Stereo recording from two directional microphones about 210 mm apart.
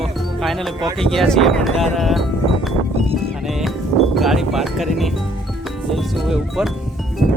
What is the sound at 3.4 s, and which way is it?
Music, centre (ahead or behind).